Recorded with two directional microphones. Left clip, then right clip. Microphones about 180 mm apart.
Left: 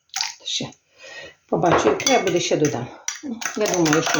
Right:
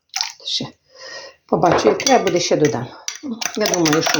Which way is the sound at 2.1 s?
30° right (ahead or behind).